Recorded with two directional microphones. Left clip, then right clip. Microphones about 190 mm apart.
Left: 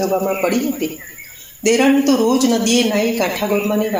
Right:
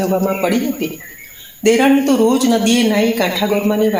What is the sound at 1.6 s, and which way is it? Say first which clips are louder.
Speech: right 2 dB; 30° right (ahead or behind).